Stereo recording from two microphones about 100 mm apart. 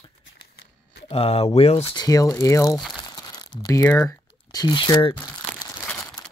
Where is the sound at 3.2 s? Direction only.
40° left (ahead or behind).